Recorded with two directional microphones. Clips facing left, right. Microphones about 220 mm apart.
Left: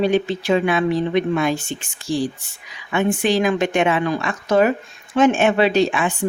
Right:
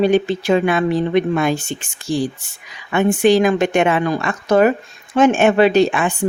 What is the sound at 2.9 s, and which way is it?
Speech, 50° right (ahead or behind).